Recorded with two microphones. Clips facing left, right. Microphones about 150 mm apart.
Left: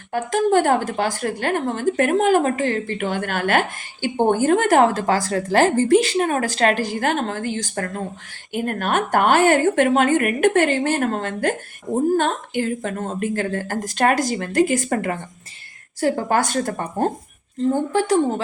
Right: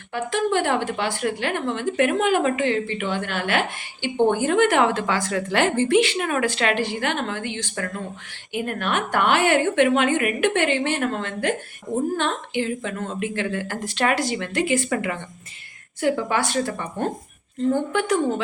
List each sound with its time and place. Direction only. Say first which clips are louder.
0.1 s a woman's voice: left 4 dB; 45° left (ahead or behind)
17.7 s speech: left 2 dB; 35° left (ahead or behind)